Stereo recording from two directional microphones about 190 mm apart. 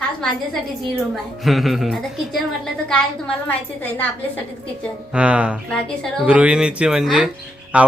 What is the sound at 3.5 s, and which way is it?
Speech, 10° left (ahead or behind).